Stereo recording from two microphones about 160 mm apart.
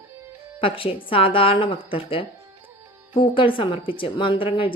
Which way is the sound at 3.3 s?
30° left (ahead or behind).